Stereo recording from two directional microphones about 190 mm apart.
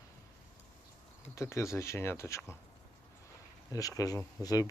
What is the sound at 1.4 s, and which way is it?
Speech, 15° left (ahead or behind).